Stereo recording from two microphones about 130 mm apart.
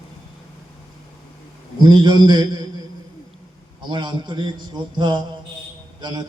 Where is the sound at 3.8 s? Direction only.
35° right (ahead or behind).